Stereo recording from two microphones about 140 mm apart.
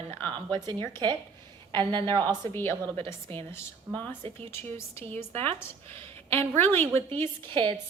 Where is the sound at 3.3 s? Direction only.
15° left (ahead or behind).